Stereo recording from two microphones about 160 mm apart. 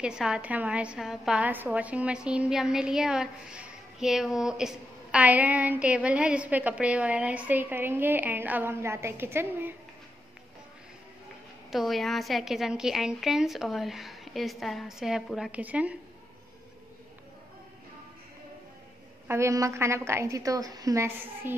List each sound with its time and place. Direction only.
0.0 s a woman's voice: 5° right (ahead or behind)
11.7 s a woman's voice: centre (ahead or behind)
19.2 s a woman's voice: 15° right (ahead or behind)